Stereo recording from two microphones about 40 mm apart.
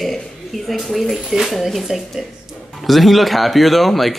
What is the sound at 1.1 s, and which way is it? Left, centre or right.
Speech, centre.